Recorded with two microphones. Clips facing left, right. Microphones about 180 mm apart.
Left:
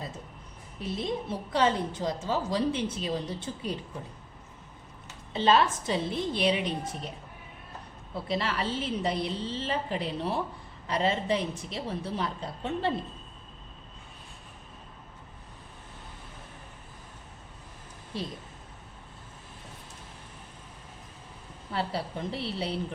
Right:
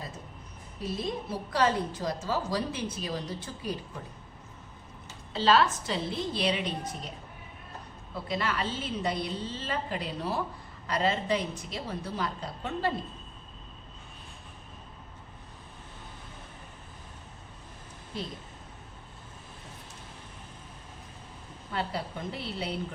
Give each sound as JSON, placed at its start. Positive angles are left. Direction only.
{"t": 0.8, "sound": "a woman's voice", "side_deg": 25}
{"t": 5.3, "sound": "a woman's voice", "side_deg": 20}
{"t": 8.1, "sound": "a woman's voice", "side_deg": 30}
{"t": 21.7, "sound": "a woman's voice", "side_deg": 30}